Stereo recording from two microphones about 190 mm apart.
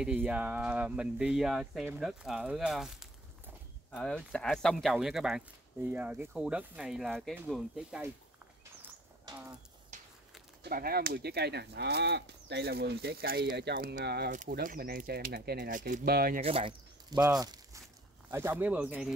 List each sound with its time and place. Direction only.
0.0 s speech: 5° right (ahead or behind)
10.6 s speech: 50° right (ahead or behind)
16.3 s speech: 30° right (ahead or behind); by 19.1 s 5° right (ahead or behind)